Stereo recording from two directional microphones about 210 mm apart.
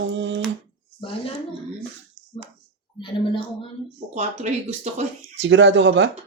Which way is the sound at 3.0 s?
25° left (ahead or behind).